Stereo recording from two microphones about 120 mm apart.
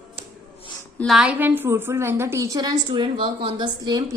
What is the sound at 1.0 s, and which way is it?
A woman's voice, 5° right (ahead or behind).